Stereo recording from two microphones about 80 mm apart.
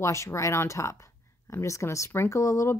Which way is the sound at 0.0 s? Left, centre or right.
Left.